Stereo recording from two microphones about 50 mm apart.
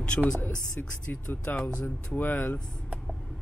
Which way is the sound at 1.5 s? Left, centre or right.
Left.